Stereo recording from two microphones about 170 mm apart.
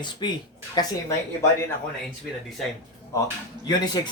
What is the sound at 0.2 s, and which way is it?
Speech, 25° left (ahead or behind).